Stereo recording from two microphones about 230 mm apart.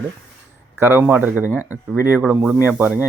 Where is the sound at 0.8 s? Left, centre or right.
Centre.